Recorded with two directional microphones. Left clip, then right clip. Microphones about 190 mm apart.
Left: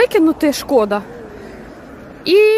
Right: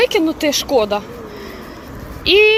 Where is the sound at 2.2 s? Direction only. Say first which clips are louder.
Even; 35° left (ahead or behind).